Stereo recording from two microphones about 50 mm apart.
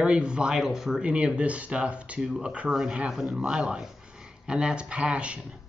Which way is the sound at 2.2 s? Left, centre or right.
Centre.